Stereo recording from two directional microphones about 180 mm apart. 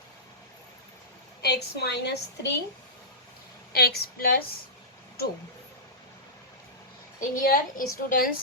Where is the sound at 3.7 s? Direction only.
60° left (ahead or behind).